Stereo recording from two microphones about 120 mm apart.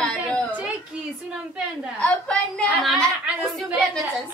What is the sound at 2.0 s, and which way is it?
A woman's voice, 10° left (ahead or behind).